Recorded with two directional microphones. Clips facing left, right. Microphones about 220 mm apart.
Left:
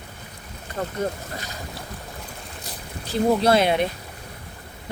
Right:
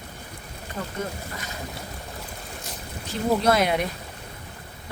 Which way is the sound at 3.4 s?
30° left (ahead or behind).